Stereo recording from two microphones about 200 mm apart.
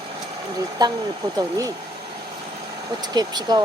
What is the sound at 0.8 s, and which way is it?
Speech, 20° right (ahead or behind).